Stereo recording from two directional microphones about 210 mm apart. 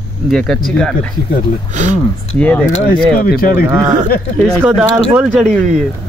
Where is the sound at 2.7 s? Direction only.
45° left (ahead or behind).